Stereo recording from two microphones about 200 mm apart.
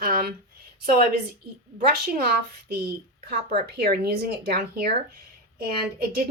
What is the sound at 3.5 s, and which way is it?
A woman's voice, 50° right (ahead or behind).